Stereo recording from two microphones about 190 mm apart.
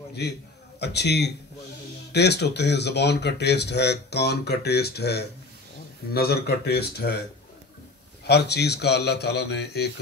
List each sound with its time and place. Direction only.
0.7 s speech: 60° left (ahead or behind)
8.3 s speech: 60° left (ahead or behind)